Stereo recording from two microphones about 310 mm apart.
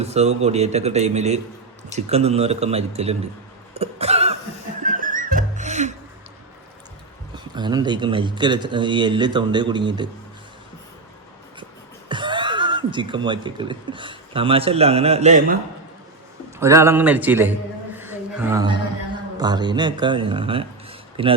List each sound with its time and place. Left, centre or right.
0.0 s a man's voice: right
3.8 s cough: centre
4.8 s music: right
7.3 s speech: centre
12.0 s speech: centre
16.6 s speech: centre
17.9 s a sound: centre
19.4 s speech: centre